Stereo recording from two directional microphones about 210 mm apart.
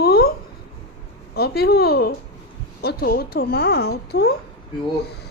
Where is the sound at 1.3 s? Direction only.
50° left (ahead or behind).